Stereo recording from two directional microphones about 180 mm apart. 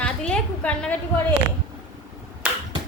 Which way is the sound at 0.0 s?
5° left (ahead or behind).